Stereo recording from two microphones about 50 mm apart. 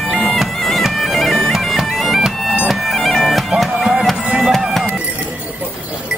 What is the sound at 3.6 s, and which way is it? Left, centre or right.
Music, centre.